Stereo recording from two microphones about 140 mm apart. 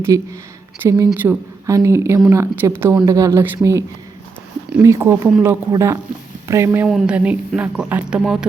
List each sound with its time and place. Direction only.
0.1 s a woman's voice: 25° right (ahead or behind)
6.8 s a woman's voice: 5° right (ahead or behind)